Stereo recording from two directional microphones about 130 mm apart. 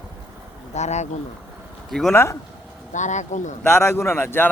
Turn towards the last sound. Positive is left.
turn(degrees=15)  # may be behind; listen again after turning